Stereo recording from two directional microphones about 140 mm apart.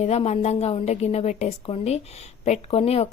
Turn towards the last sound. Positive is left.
turn(degrees=45)  # may be behind; listen again after turning